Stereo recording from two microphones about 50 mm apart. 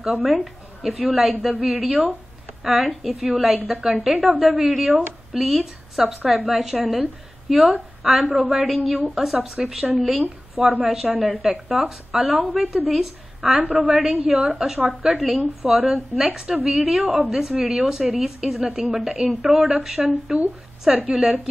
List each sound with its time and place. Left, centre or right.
0.0 s a woman's voice: centre
10.6 s a woman's voice: centre
13.7 s a woman's voice: right
13.9 s a woman's voice: centre
19.2 s a woman's voice: centre